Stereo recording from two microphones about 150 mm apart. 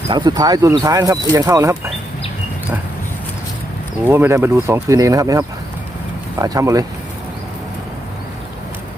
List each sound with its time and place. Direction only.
0.1 s speech: 30° right (ahead or behind)
4.1 s speech: 15° right (ahead or behind)